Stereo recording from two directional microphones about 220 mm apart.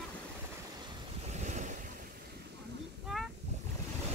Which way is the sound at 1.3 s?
30° right (ahead or behind).